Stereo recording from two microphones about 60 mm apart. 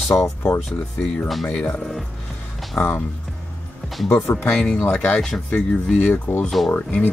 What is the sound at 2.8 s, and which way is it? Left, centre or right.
Speech, left.